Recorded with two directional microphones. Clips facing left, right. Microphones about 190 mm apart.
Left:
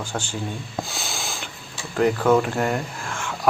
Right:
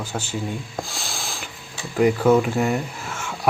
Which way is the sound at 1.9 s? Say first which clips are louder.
Right 2 dB; 5° right (ahead or behind).